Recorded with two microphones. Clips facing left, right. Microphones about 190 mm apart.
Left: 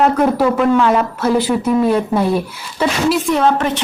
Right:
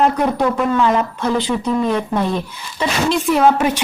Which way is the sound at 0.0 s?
5° left (ahead or behind).